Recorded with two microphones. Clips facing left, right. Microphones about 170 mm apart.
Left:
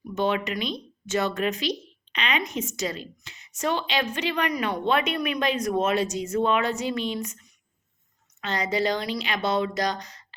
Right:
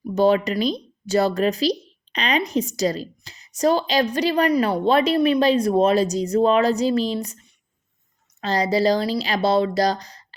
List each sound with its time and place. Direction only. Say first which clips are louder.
0.1 s a woman's voice: right 8 dB; 35° right (ahead or behind)